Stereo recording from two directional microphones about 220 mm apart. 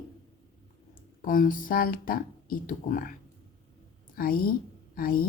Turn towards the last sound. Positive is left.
turn(degrees=40)  # may be behind; listen again after turning